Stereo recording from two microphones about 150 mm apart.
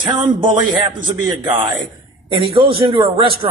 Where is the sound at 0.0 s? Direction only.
30° right (ahead or behind).